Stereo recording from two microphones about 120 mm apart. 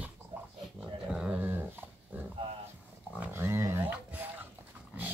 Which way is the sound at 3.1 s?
20° right (ahead or behind).